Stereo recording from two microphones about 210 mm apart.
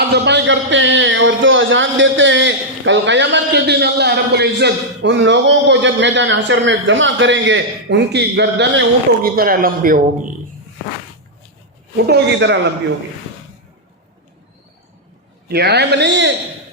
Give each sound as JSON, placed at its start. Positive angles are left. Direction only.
{"t": 0.1, "sound": "a man's voice", "side_deg": -55}
{"t": 9.2, "sound": "speech", "side_deg": -45}
{"t": 11.9, "sound": "a man's voice", "side_deg": -55}
{"t": 15.4, "sound": "speech", "side_deg": -50}